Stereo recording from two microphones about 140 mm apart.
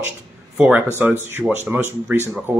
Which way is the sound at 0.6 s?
10° right (ahead or behind).